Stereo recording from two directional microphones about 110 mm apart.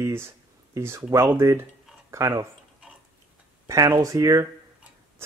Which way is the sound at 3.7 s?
35° right (ahead or behind).